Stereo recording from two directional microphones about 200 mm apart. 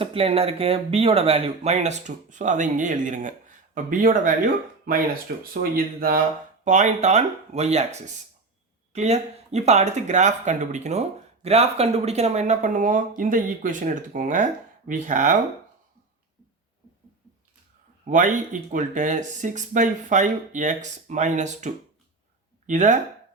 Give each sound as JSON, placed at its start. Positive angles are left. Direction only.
{"t": 0.0, "sound": "speech", "side_deg": -30}
{"t": 5.4, "sound": "speech", "side_deg": -45}
{"t": 6.7, "sound": "speech", "side_deg": -35}
{"t": 18.0, "sound": "speech", "side_deg": -40}